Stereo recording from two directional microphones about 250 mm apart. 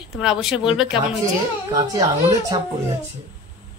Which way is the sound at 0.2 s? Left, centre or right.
Centre.